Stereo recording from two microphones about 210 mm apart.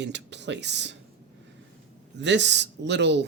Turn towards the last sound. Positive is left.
turn(degrees=-55)  # may be behind; listen again after turning